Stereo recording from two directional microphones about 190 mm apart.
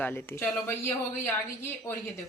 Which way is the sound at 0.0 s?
10° left (ahead or behind).